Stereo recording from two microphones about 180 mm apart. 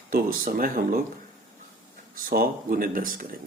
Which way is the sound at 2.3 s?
55° right (ahead or behind).